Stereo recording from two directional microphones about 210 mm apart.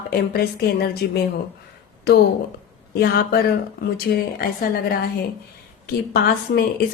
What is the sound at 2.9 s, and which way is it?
A woman's voice, 50° left (ahead or behind).